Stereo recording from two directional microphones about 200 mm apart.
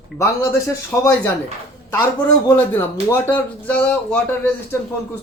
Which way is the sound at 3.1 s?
5° left (ahead or behind).